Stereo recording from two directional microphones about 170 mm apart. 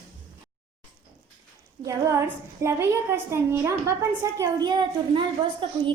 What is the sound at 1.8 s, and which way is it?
A woman's voice, 15° right (ahead or behind).